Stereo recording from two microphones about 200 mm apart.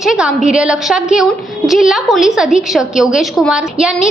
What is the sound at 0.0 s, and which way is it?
A woman's voice, 5° right (ahead or behind).